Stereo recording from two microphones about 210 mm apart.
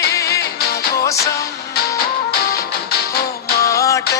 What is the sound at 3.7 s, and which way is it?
Music, 15° left (ahead or behind).